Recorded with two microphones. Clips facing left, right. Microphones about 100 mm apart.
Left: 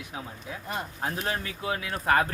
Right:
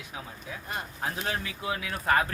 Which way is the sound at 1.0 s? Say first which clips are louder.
Even; 35° left (ahead or behind).